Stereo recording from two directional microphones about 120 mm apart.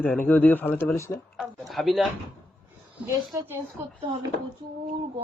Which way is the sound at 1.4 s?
Centre (ahead or behind).